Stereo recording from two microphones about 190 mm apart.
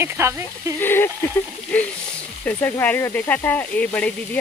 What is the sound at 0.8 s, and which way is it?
Speech, 10° left (ahead or behind).